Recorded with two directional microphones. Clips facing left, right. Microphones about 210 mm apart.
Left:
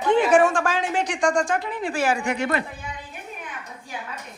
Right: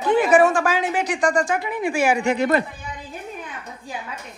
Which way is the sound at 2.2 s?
35° right (ahead or behind).